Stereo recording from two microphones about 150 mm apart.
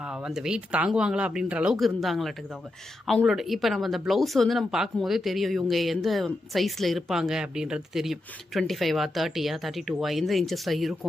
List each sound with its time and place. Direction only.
0.0 s speech: 5° right (ahead or behind)